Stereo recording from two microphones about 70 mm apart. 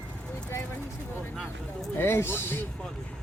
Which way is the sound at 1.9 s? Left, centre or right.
Left.